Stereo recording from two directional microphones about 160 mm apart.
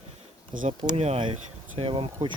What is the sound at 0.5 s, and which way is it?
Speech, 55° right (ahead or behind).